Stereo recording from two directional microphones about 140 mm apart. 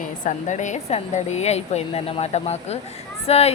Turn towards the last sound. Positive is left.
turn(degrees=50)  # may be behind; listen again after turning